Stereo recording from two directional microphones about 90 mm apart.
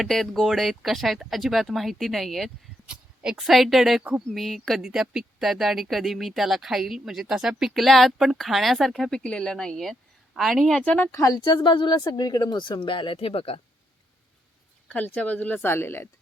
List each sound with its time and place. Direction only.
0.0 s speech: 5° left (ahead or behind)
10.8 s speech: 15° left (ahead or behind)
11.1 s speech: 40° left (ahead or behind)
11.4 s speech: 65° left (ahead or behind)
11.9 s speech: 50° left (ahead or behind); by 13.6 s 90° left
14.8 s speech: 15° left (ahead or behind)